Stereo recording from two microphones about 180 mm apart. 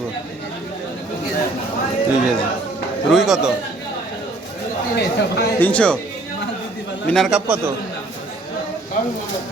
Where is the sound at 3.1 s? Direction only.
Centre (ahead or behind).